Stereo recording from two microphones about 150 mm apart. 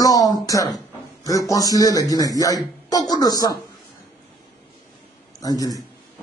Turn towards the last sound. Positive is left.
turn(degrees=25)  # may be behind; listen again after turning